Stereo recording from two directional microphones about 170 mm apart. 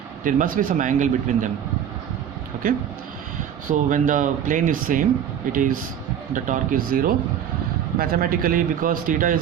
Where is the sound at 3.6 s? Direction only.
50° right (ahead or behind).